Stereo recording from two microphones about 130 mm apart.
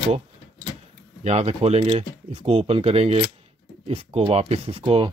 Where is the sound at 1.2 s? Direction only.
55° right (ahead or behind).